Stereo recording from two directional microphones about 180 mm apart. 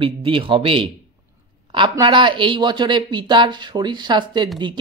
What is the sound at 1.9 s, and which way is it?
Speech, 25° right (ahead or behind).